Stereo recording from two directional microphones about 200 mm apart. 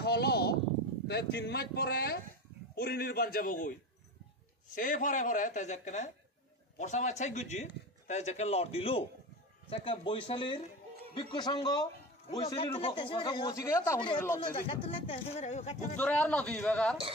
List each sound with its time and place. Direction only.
0.0 s a sound: 55° left (ahead or behind)
1.0 s a man's voice: 55° left (ahead or behind)
4.7 s a man's voice: 40° left (ahead or behind); by 14.4 s 10° left (ahead or behind)
14.9 s a man's voice: 30° left (ahead or behind)
16.0 s a man's voice: 5° left (ahead or behind)